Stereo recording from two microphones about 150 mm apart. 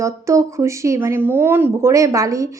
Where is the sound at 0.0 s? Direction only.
20° right (ahead or behind).